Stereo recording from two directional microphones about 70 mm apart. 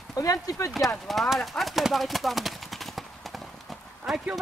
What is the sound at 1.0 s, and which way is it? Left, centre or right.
Horse, centre.